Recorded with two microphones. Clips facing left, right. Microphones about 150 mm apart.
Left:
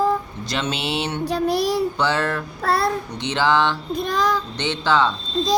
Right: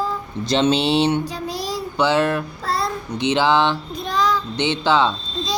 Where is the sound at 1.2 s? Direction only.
60° left (ahead or behind).